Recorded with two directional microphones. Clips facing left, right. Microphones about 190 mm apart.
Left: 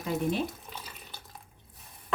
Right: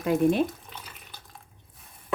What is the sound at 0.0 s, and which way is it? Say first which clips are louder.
Speech: right 7 dB; 55° right (ahead or behind).